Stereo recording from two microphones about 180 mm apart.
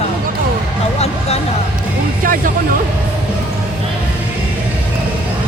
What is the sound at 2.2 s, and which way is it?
Speech, 50° right (ahead or behind).